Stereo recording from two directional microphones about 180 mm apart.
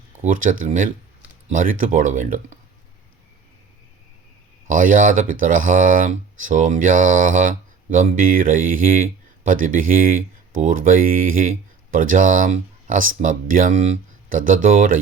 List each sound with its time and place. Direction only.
0.2 s speech: 45° right (ahead or behind)
4.7 s speech: 45° right (ahead or behind)